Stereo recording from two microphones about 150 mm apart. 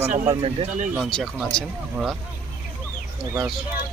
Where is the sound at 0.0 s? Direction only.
40° right (ahead or behind).